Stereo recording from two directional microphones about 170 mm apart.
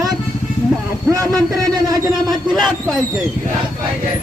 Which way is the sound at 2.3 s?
Centre (ahead or behind).